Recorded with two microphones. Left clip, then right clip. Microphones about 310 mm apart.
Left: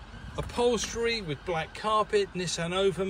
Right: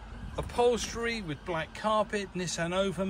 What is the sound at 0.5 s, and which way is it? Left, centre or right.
A man's voice, centre.